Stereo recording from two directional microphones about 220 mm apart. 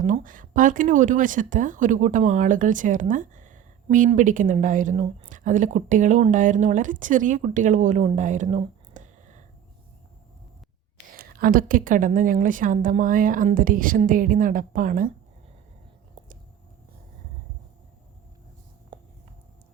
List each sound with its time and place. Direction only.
0.0 s speech: 35° right (ahead or behind)
11.1 s speech: 40° right (ahead or behind)
18.9 s a sound: 20° right (ahead or behind)